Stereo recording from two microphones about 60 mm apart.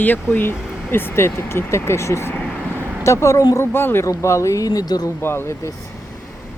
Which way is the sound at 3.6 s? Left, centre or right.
Left.